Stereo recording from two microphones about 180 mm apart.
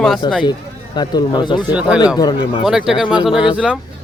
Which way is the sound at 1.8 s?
5° right (ahead or behind).